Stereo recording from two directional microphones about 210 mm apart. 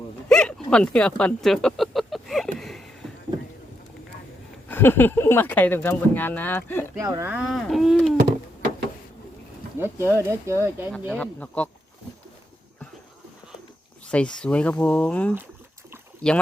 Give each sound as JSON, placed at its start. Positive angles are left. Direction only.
{"t": 0.3, "sound": "a sound", "side_deg": 5}
{"t": 4.7, "sound": "speech", "side_deg": 10}
{"t": 7.0, "sound": "speech", "side_deg": -15}
{"t": 7.3, "sound": "speech", "side_deg": 0}
{"t": 9.7, "sound": "speech", "side_deg": -10}
{"t": 11.1, "sound": "speech", "side_deg": 5}
{"t": 14.1, "sound": "speech", "side_deg": 5}